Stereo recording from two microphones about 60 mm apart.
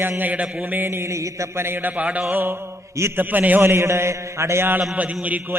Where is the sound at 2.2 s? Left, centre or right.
Right.